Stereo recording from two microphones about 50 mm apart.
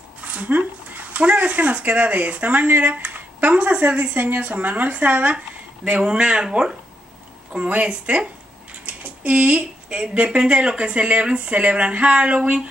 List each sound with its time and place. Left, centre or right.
0.3 s speech: right
3.5 s speech: centre
3.8 s speech: right; by 6.8 s centre
7.5 s speech: right
12.4 s speech: centre